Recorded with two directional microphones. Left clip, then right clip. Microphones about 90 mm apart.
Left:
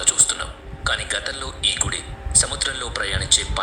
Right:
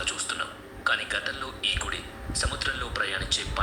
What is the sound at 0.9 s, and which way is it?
A man's voice, 50° left (ahead or behind).